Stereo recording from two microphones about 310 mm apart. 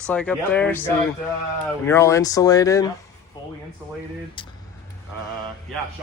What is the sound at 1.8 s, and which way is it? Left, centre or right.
Speech, centre.